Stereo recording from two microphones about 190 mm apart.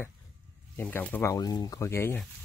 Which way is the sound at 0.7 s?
10° left (ahead or behind).